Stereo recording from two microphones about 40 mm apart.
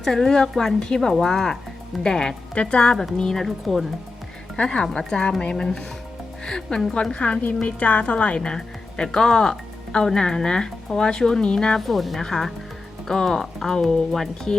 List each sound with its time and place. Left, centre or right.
0.0 s speech: centre
0.8 s a woman's voice: centre
3.4 s speech: centre
4.5 s a woman's voice: left
6.9 s a woman's voice: left
8.4 s speech: centre
11.9 s speech: centre
12.2 s speech: centre